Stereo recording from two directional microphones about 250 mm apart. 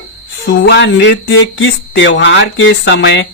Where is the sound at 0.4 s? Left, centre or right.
Left.